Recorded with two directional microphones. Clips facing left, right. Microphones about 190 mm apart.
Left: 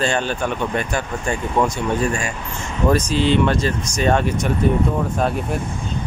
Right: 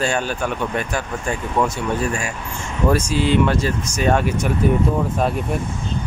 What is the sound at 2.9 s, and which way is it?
Speech, 10° right (ahead or behind).